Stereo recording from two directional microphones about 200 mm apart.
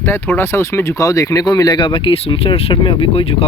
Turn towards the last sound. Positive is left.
turn(degrees=30)  # may be behind; listen again after turning